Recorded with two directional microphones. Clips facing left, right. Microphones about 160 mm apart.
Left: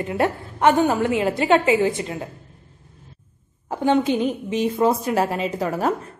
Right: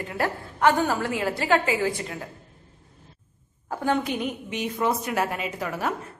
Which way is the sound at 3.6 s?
25° left (ahead or behind).